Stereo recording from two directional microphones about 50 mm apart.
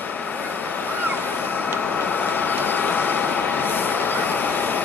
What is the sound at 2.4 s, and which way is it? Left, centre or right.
Vehicle, left.